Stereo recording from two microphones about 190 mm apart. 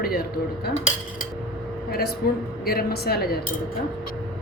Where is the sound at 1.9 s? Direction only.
55° left (ahead or behind).